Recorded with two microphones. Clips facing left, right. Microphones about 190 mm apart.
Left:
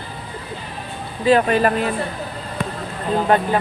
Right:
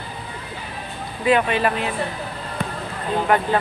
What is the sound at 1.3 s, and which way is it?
Speech, 40° left (ahead or behind).